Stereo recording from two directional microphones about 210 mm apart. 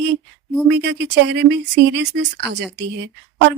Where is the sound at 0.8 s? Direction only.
55° right (ahead or behind).